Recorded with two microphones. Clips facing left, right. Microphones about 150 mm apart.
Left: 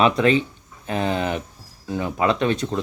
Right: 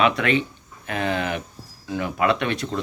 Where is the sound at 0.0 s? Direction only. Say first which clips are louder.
Left 3 dB; 35° left (ahead or behind).